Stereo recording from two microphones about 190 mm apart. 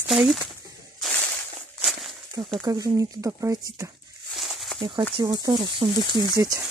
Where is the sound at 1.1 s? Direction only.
10° left (ahead or behind).